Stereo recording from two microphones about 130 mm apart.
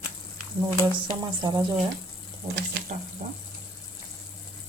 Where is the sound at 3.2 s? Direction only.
65° right (ahead or behind).